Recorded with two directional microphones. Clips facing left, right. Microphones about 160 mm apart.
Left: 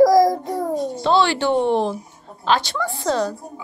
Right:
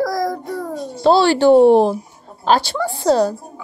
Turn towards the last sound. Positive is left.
turn(degrees=-35)  # may be behind; listen again after turning